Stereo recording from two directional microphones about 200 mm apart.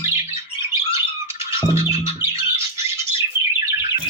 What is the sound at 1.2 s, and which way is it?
Music, 15° right (ahead or behind).